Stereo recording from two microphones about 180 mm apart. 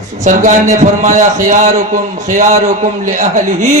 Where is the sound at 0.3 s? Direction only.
45° right (ahead or behind).